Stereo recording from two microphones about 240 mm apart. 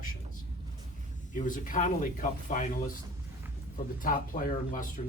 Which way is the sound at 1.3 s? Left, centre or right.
Left.